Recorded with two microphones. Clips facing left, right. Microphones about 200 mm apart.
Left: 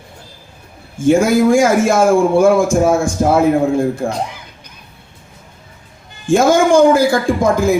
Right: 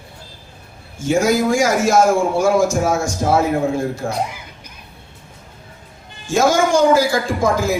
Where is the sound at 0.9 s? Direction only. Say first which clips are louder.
Left 5 dB; 55° left (ahead or behind).